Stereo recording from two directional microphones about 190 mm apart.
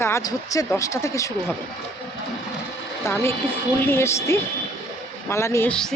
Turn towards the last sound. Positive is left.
turn(degrees=5)  # may be behind; listen again after turning